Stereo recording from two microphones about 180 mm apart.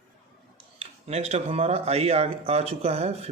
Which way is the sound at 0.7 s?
35° right (ahead or behind).